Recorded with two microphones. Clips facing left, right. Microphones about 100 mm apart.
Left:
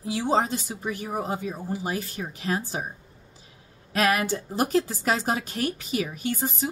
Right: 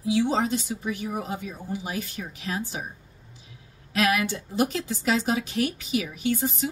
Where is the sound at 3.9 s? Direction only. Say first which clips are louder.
Left 1 dB; 40° left (ahead or behind).